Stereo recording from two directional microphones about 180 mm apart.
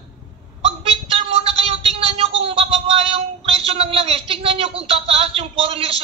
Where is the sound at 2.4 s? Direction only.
30° right (ahead or behind).